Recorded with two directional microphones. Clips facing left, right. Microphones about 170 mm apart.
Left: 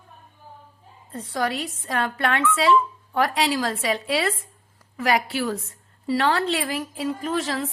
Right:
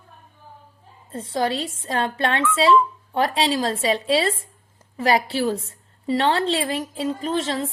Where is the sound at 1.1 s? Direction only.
25° right (ahead or behind).